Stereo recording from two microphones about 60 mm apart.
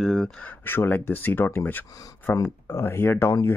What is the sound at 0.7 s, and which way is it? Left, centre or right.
Speech, left.